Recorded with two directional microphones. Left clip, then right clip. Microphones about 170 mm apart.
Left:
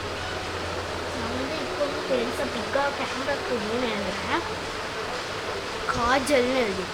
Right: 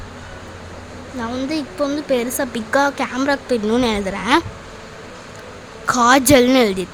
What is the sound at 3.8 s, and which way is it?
Speech, 90° right.